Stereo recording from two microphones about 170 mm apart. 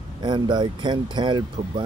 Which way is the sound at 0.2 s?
25° right (ahead or behind).